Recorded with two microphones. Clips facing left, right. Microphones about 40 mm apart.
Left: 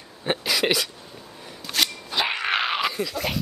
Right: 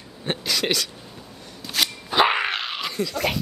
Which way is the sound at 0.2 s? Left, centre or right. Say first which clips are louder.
Left 2 dB; centre.